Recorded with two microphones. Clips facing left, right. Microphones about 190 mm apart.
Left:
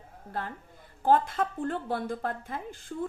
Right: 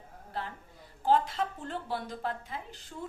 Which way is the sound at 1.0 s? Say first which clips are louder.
Left 3 dB; 50° left (ahead or behind).